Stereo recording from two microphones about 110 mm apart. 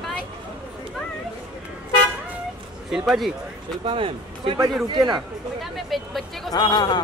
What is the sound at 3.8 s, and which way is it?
Speech, 55° right (ahead or behind).